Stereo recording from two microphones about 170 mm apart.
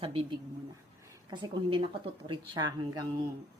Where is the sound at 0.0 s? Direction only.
35° right (ahead or behind).